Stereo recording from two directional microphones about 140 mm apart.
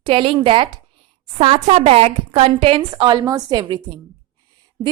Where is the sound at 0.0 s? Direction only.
40° right (ahead or behind).